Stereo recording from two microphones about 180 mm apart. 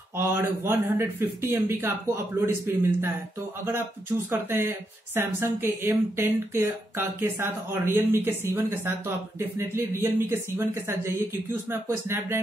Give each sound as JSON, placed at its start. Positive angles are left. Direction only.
{"t": 0.1, "sound": "speech", "side_deg": -15}
{"t": 4.3, "sound": "speech", "side_deg": -15}